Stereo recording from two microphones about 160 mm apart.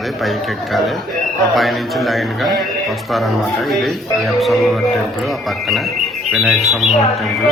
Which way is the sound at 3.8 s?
Centre (ahead or behind).